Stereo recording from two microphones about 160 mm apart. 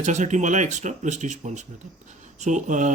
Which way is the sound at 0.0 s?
50° right (ahead or behind).